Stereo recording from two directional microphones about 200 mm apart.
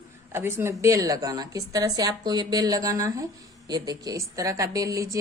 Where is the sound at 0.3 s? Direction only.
10° right (ahead or behind).